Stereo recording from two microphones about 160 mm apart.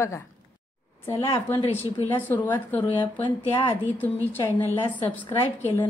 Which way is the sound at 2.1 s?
10° left (ahead or behind).